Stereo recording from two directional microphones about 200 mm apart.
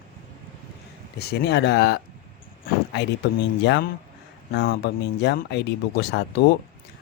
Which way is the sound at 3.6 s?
55° left (ahead or behind).